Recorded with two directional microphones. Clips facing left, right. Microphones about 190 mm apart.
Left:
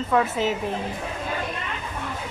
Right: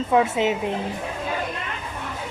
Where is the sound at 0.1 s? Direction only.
20° right (ahead or behind).